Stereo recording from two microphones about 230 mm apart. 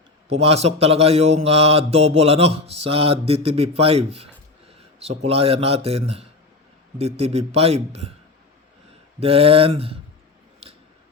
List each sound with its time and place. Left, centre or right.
0.3 s a man's voice: right
9.2 s a man's voice: right